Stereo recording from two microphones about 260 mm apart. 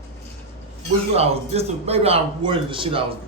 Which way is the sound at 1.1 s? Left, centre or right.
Right.